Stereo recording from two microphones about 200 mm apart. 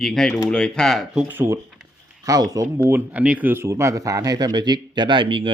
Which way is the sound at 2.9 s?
10° right (ahead or behind).